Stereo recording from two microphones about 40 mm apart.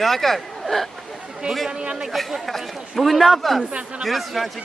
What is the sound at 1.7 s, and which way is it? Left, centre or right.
Speech, right.